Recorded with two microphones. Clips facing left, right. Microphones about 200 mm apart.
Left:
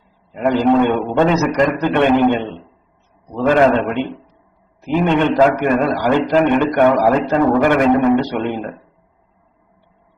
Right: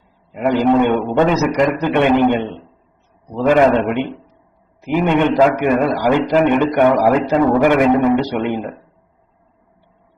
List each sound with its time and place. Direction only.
0.3 s a man's voice: 15° right (ahead or behind)